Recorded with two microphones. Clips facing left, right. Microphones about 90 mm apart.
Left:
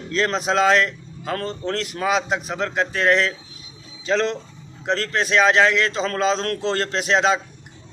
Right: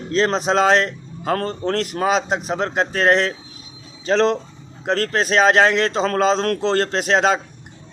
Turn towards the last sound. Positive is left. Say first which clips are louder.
# right 2 dB
turn(degrees=-45)  # may be behind; listen again after turning